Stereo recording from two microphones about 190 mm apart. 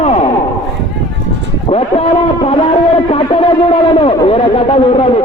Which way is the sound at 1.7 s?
30° left (ahead or behind).